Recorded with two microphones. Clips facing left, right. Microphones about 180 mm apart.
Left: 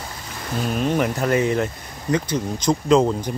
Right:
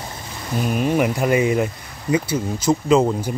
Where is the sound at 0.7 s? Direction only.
10° right (ahead or behind).